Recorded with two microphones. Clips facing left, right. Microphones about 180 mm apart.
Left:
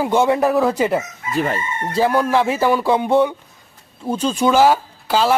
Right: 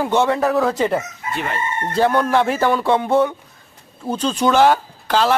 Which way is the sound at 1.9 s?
5° left (ahead or behind).